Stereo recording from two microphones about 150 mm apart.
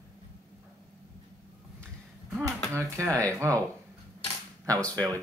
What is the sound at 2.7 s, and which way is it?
Speech, 20° right (ahead or behind).